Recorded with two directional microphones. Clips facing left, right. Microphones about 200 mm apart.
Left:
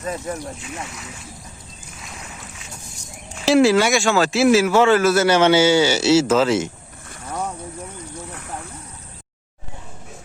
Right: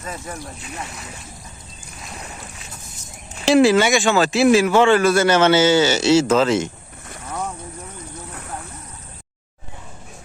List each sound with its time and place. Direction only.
0.6 s speech: 35° right (ahead or behind)
2.0 s boat: 35° right (ahead or behind)
3.4 s a man's voice: centre (ahead or behind)